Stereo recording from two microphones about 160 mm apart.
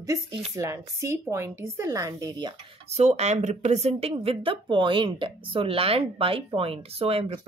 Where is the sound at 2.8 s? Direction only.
45° right (ahead or behind).